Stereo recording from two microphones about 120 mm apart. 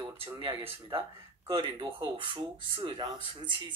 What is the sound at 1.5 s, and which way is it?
Speech, 40° right (ahead or behind).